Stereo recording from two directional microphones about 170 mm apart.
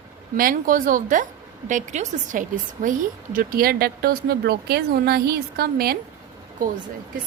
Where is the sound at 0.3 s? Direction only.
55° right (ahead or behind).